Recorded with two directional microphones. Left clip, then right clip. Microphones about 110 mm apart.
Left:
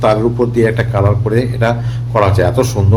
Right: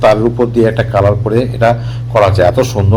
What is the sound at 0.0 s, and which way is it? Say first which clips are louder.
A man's voice: right 3 dB; 10° right (ahead or behind).